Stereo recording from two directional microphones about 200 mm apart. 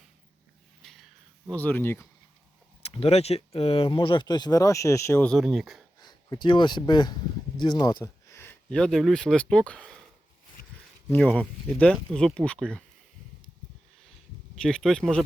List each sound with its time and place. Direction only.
0.8 s a sound: centre (ahead or behind)
1.5 s speech: 10° left (ahead or behind)
2.8 s speech: 30° left (ahead or behind); by 5.8 s centre (ahead or behind)
6.0 s speech: 20° left (ahead or behind); by 10.0 s 5° left (ahead or behind)
11.1 s speech: 5° left (ahead or behind)
14.5 s speech: 5° left (ahead or behind)